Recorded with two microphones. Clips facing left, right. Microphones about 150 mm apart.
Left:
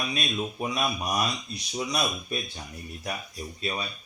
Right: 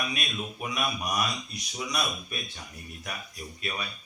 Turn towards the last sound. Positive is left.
turn(degrees=30)  # may be behind; listen again after turning